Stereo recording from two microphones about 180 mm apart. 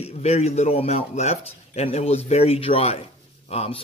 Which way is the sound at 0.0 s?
35° left (ahead or behind).